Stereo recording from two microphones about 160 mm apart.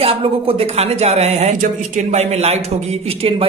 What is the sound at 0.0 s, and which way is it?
Speech, 35° right (ahead or behind).